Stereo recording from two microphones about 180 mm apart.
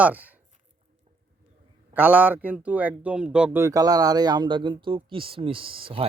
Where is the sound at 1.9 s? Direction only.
10° right (ahead or behind).